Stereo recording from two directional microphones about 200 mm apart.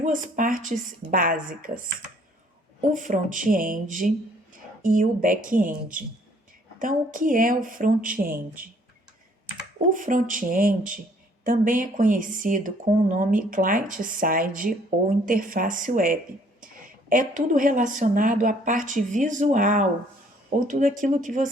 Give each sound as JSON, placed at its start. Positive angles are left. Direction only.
{"t": 0.0, "sound": "speech", "side_deg": -40}
{"t": 2.9, "sound": "speech", "side_deg": -40}
{"t": 9.9, "sound": "speech", "side_deg": -40}